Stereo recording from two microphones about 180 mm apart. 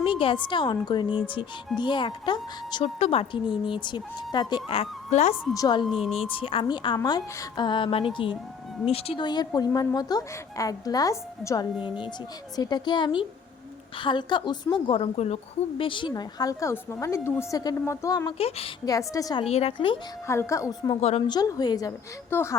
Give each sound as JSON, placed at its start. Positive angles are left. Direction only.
{"t": 0.0, "sound": "a sound", "side_deg": 30}
{"t": 0.4, "sound": "a woman's voice", "side_deg": 25}
{"t": 5.5, "sound": "a woman's voice", "side_deg": 20}
{"t": 5.8, "sound": "speech", "side_deg": 0}
{"t": 6.2, "sound": "a woman's voice", "side_deg": 30}
{"t": 18.3, "sound": "a woman's voice", "side_deg": 35}
{"t": 18.9, "sound": "a woman's voice", "side_deg": 20}
{"t": 19.5, "sound": "a woman's voice", "side_deg": 35}
{"t": 20.2, "sound": "a child's voice", "side_deg": 15}